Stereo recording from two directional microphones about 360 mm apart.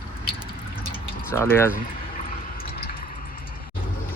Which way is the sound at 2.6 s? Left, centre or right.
Left.